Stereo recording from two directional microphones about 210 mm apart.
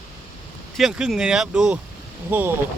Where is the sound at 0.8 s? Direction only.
Centre (ahead or behind).